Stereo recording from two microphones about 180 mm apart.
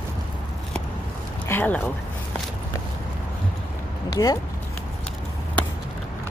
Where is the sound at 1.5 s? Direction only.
10° left (ahead or behind).